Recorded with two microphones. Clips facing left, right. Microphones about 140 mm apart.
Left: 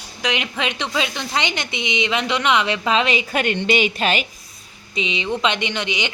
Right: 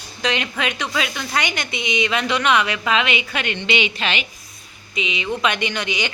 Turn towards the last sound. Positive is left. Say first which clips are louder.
# even
turn(degrees=20)  # may be behind; listen again after turning